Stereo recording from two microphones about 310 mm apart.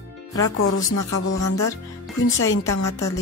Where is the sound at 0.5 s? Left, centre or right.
Left.